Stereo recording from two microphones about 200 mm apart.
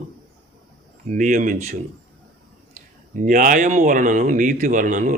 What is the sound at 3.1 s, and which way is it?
Speech, 40° right (ahead or behind).